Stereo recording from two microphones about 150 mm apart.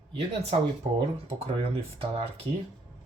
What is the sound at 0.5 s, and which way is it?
Speech, 40° right (ahead or behind).